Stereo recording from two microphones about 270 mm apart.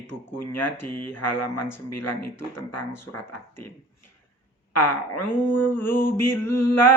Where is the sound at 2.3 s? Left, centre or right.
Left.